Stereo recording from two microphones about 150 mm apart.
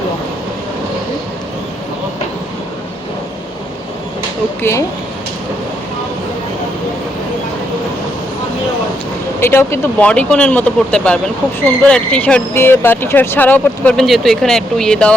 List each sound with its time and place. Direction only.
4.6 s speech: 20° left (ahead or behind)
9.4 s speech: 15° left (ahead or behind)